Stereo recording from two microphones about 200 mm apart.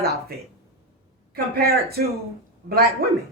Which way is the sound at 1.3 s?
50° right (ahead or behind).